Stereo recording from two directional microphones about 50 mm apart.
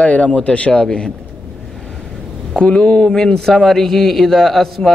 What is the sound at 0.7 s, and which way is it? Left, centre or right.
Speech, centre.